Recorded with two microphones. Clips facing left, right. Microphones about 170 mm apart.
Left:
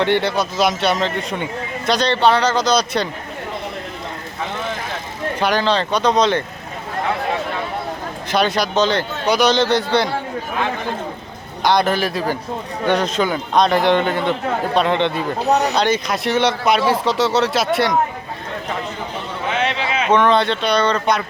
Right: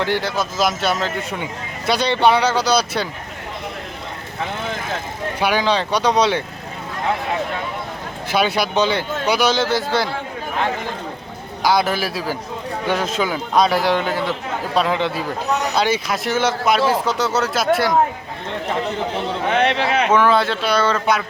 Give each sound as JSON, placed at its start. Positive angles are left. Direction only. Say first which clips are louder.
{"t": 0.0, "sound": "speech", "louder": "left 3 dB", "side_deg": -5}
{"t": 5.4, "sound": "speech", "louder": "left 1 dB", "side_deg": -10}
{"t": 8.3, "sound": "speech", "louder": "left 1 dB", "side_deg": -10}
{"t": 11.6, "sound": "speech", "louder": "left 2 dB", "side_deg": -5}
{"t": 19.5, "sound": "a sound", "louder": "right 3 dB", "side_deg": -60}
{"t": 20.1, "sound": "speech", "louder": "left 3 dB", "side_deg": -5}